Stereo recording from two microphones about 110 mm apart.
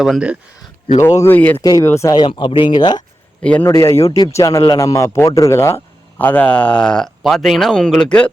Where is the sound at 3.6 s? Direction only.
25° left (ahead or behind).